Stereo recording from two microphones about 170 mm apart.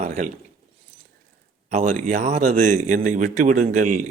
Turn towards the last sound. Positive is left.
turn(degrees=-45)  # may be behind; listen again after turning